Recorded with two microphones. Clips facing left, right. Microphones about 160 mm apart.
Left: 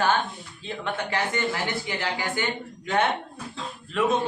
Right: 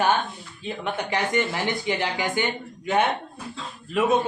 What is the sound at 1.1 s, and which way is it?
A man's voice, 20° right (ahead or behind).